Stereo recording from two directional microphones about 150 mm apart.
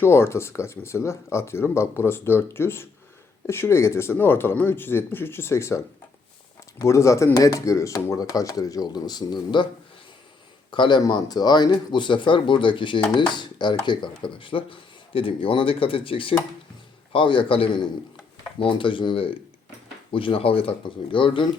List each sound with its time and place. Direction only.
0.0 s speech: 15° left (ahead or behind)
10.7 s speech: 30° left (ahead or behind)